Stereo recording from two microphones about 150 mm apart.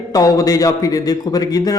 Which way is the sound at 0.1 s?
25° left (ahead or behind).